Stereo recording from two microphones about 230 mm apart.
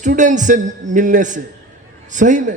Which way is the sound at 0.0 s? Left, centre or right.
Right.